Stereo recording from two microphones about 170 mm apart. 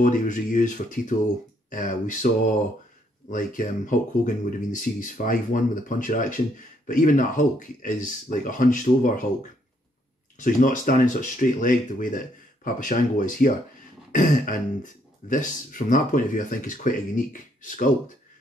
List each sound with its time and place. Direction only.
0.0 s speech: 50° left (ahead or behind)
10.3 s speech: 50° left (ahead or behind)